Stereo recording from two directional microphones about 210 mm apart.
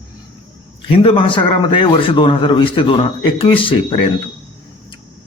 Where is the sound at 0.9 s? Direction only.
25° left (ahead or behind).